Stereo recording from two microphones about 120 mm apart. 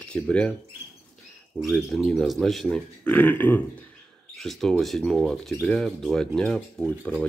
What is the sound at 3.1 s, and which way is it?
Speech, 15° left (ahead or behind).